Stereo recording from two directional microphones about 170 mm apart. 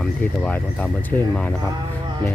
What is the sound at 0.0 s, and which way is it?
Speech, 5° left (ahead or behind).